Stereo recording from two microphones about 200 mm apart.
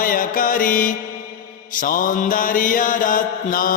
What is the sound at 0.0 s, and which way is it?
Mantra, 45° left (ahead or behind).